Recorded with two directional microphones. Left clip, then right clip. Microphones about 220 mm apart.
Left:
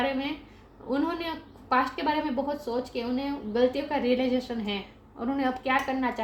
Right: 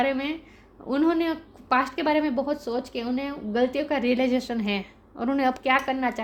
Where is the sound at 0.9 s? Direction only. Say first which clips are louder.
Right 6 dB; 50° right (ahead or behind).